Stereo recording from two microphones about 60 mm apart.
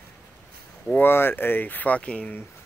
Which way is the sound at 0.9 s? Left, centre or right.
Left.